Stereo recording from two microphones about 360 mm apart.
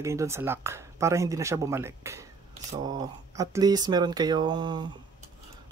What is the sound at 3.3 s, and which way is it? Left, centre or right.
Speech, centre.